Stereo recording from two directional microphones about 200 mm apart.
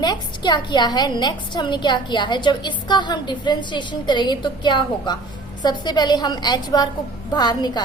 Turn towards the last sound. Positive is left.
turn(degrees=20)  # may be behind; listen again after turning